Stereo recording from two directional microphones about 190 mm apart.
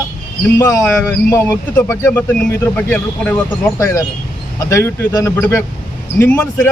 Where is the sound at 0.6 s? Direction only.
15° left (ahead or behind).